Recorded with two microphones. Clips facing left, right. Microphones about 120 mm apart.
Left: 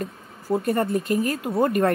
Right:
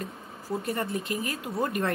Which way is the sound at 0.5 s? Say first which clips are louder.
Left 8 dB; 50° left (ahead or behind).